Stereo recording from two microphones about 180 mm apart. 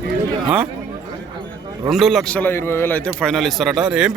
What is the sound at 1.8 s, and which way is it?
A man's voice, centre (ahead or behind).